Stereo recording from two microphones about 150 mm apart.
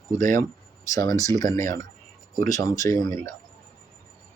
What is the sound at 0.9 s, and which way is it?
Speech, 20° left (ahead or behind).